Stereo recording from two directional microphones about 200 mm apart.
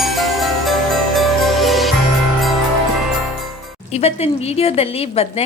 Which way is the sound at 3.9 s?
30° left (ahead or behind).